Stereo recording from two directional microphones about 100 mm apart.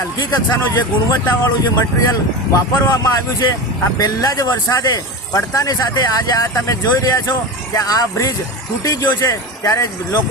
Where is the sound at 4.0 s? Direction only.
40° left (ahead or behind).